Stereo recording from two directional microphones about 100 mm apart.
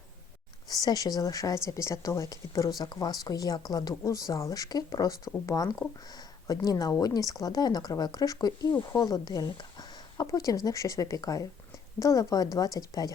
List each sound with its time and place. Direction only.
0.7 s a woman's voice: 40° left (ahead or behind)